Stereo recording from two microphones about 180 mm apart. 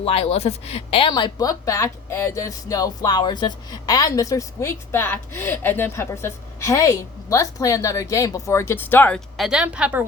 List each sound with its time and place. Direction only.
0.0 s a woman's voice: 30° left (ahead or behind); by 10.1 s 10° right (ahead or behind)